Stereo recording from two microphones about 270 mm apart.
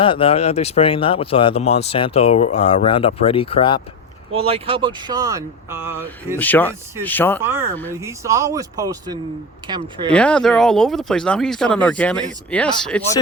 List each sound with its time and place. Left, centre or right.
0.0 s speech: centre
4.4 s speech: right
6.4 s speech: centre
7.4 s speech: centre
10.1 s speech: centre